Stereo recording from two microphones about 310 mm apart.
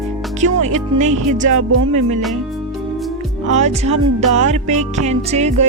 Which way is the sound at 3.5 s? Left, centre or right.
Right.